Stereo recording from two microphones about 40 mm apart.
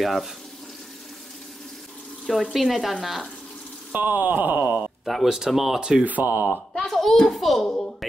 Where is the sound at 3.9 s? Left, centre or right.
Right.